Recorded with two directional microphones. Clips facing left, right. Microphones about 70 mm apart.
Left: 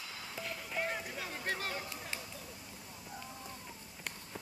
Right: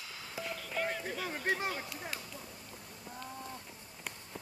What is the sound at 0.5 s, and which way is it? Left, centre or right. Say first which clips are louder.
Music: right 1 dB; centre.